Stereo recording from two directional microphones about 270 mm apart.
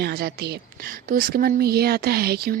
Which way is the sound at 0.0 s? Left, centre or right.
Right.